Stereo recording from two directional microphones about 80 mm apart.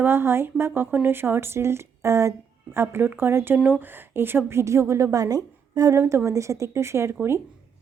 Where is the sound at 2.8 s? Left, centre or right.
Right.